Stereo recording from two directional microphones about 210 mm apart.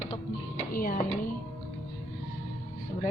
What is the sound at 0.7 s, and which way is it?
Speech, 45° left (ahead or behind).